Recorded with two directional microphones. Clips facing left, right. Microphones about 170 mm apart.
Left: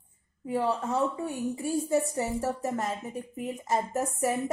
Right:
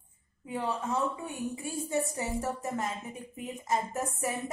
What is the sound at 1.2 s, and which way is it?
Speech, 35° left (ahead or behind).